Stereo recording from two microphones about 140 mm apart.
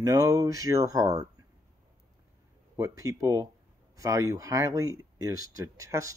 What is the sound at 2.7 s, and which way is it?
Speech, 20° right (ahead or behind).